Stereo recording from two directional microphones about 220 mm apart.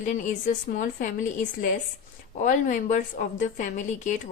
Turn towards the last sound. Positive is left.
turn(degrees=35)  # may be behind; listen again after turning